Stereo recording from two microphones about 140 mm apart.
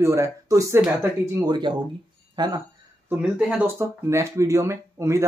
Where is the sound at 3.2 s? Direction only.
5° right (ahead or behind).